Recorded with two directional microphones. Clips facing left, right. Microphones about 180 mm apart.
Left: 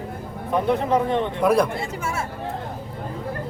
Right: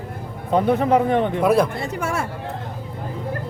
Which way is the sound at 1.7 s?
65° right (ahead or behind).